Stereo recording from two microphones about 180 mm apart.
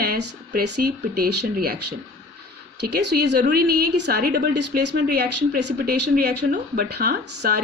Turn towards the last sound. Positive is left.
turn(degrees=-60)  # may be behind; listen again after turning